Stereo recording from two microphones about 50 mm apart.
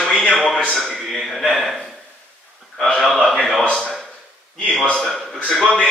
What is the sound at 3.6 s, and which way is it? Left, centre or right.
A man's voice, left.